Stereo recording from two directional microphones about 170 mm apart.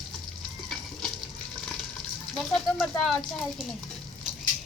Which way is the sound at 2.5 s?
Centre (ahead or behind).